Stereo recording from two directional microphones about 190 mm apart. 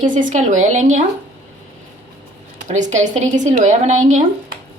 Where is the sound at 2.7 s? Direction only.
40° right (ahead or behind).